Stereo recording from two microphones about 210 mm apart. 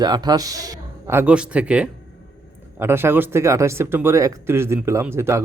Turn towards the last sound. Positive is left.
turn(degrees=-10)  # may be behind; listen again after turning